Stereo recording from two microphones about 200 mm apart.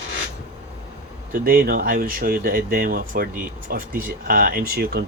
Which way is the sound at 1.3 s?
50° right (ahead or behind).